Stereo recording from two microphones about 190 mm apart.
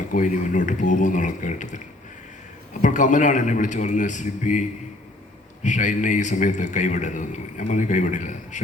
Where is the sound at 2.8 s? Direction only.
40° left (ahead or behind).